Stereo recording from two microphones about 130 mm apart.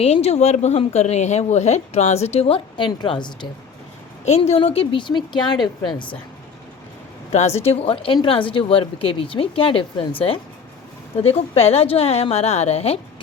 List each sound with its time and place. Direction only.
0.0 s speech: 55° left (ahead or behind); by 3.3 s 35° left (ahead or behind)
4.3 s speech: 55° left (ahead or behind); by 5.5 s 35° left (ahead or behind)
7.6 s speech: 50° left (ahead or behind)